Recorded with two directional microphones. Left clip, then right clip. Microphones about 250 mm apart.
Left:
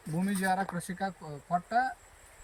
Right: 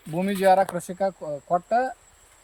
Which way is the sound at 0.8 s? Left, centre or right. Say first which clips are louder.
Right 10 dB; right.